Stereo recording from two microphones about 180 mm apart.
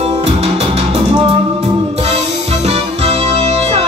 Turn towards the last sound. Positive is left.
turn(degrees=-35)  # may be behind; listen again after turning